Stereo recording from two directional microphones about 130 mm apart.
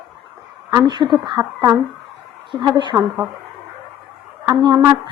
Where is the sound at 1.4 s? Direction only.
20° right (ahead or behind).